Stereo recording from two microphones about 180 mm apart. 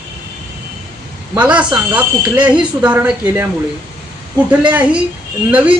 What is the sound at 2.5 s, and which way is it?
Speech, 25° right (ahead or behind).